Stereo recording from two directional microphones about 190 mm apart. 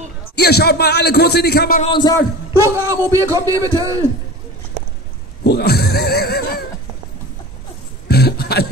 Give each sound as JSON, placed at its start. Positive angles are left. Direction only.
{"t": 0.4, "sound": "a man's voice", "side_deg": 55}
{"t": 1.9, "sound": "a man's voice", "side_deg": 20}
{"t": 2.5, "sound": "a man's voice", "side_deg": -15}
{"t": 5.4, "sound": "speech", "side_deg": 60}
{"t": 8.1, "sound": "throat clearing", "side_deg": 55}